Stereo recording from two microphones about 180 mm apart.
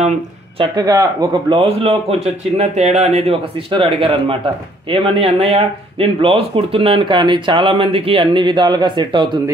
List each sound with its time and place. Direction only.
0.6 s a man's voice: 20° right (ahead or behind)